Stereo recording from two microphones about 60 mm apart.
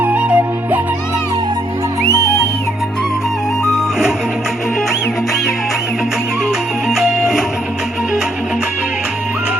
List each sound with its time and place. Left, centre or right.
0.0 s music: right
3.6 s music: centre
6.8 s music: centre